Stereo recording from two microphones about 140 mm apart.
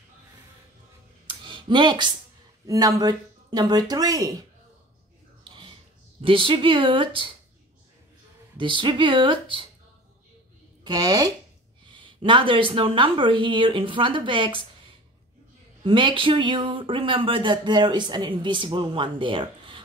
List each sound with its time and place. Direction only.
1.3 s a sound: 35° right (ahead or behind)
2.6 s speech: 25° right (ahead or behind)
5.4 s mechanisms: 35° right (ahead or behind)
6.2 s speech: 40° right (ahead or behind)
8.5 s speech: 35° right (ahead or behind)
10.8 s speech: 30° right (ahead or behind)
15.8 s speech: 35° right (ahead or behind)